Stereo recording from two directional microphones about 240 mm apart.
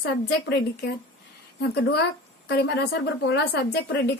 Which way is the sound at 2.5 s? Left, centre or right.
Left.